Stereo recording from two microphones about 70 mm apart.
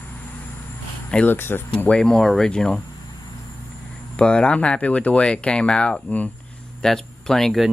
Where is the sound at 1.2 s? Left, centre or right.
Left.